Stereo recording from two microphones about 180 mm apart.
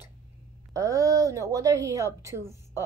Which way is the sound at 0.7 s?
20° right (ahead or behind).